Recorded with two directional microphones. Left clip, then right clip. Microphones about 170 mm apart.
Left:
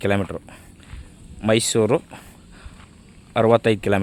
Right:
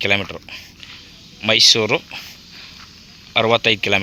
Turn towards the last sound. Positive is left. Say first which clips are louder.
# right 2 dB
turn(degrees=50)  # may be behind; listen again after turning